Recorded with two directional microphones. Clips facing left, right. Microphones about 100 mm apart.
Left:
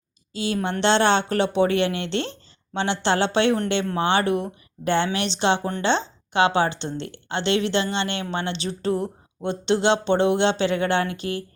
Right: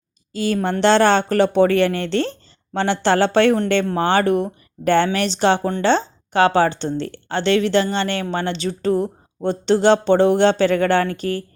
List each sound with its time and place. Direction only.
0.3 s speech: 45° right (ahead or behind)